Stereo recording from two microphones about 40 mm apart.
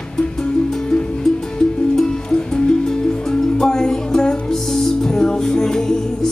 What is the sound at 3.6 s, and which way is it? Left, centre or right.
Music, centre.